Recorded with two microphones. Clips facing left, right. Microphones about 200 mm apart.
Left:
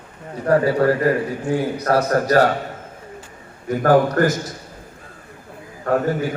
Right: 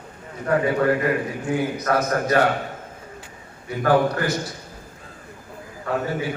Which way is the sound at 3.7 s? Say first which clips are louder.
Left 4 dB; 45° left (ahead or behind).